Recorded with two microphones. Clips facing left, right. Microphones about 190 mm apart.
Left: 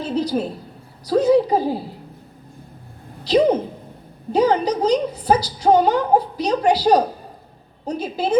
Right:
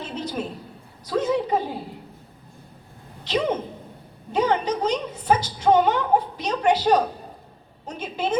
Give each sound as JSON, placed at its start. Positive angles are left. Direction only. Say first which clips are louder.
{"t": 0.0, "sound": "a sound", "louder": "left 8 dB", "side_deg": 35}
{"t": 1.0, "sound": "a woman's voice", "louder": "left 8 dB", "side_deg": 35}
{"t": 3.2, "sound": "a woman's voice", "louder": "left 8 dB", "side_deg": 35}